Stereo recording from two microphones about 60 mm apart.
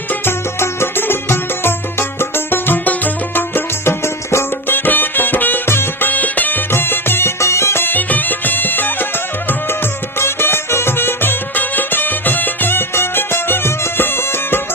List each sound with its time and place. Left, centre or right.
0.1 s music: left
4.9 s music: left
10.2 s music: left